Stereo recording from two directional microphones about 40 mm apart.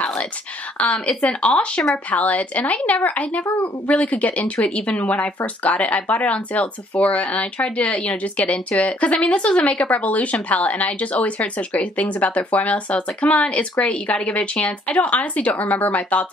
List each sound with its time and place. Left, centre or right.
0.8 s speech: left
2.0 s speech: left
4.6 s speech: left